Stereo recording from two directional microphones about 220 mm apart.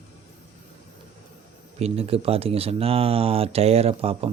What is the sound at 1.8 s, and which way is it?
Speech, 25° right (ahead or behind).